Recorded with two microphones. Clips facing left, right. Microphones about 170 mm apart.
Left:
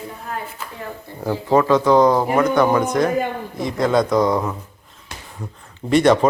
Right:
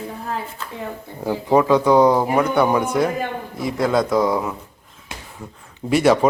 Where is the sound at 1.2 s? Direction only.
15° right (ahead or behind).